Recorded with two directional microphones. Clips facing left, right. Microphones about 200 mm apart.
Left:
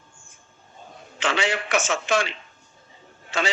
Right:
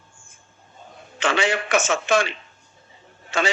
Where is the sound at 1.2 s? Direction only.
50° right (ahead or behind).